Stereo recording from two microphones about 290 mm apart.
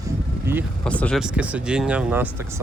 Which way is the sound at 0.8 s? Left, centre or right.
Centre.